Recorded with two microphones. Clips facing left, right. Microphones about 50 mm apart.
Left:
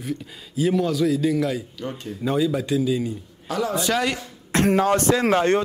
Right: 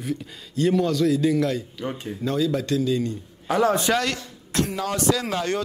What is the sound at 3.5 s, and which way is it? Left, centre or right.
Speech, right.